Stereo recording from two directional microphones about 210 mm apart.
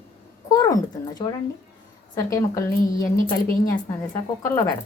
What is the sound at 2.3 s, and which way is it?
Speech, 15° left (ahead or behind).